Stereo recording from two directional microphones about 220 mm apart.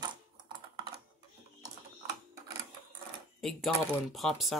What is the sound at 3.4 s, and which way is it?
Speech, centre (ahead or behind).